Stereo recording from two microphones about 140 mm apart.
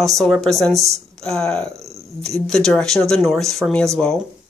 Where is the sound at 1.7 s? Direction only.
20° right (ahead or behind).